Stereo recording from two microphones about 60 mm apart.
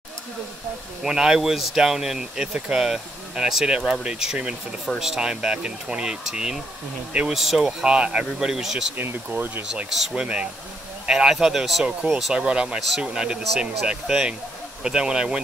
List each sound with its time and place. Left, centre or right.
1.0 s speech: centre
7.8 s speech: centre
8.9 s speech: right
10.0 s speech: centre